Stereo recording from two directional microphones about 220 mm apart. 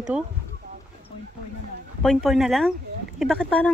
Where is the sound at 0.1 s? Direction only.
5° right (ahead or behind).